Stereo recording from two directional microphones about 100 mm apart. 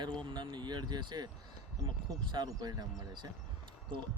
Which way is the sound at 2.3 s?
45° right (ahead or behind).